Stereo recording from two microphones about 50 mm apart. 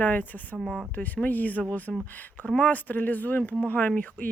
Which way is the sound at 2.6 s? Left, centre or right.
Left.